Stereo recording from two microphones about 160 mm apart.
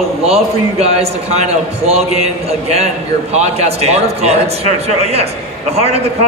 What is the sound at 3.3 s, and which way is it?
Speech, 40° right (ahead or behind).